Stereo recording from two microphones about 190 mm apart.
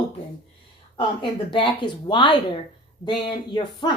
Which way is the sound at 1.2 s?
25° left (ahead or behind).